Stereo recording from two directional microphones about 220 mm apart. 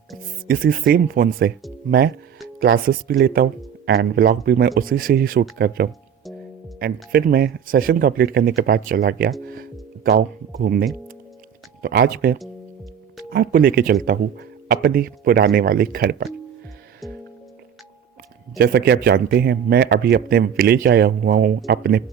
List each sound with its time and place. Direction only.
0.4 s speech: 45° right (ahead or behind)
2.7 s speech: 40° right (ahead or behind)
18.5 s speech: 45° right (ahead or behind)